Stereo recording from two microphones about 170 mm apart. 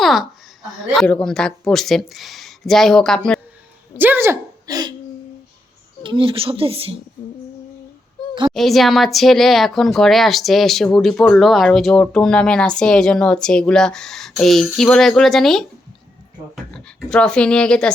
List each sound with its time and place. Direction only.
0.0 s a sound: centre (ahead or behind)
0.9 s speech: 5° left (ahead or behind)
3.9 s a sound: 10° right (ahead or behind)
6.0 s a woman's voice: 30° right (ahead or behind)
8.5 s speech: centre (ahead or behind)
16.7 s speech: 5° left (ahead or behind)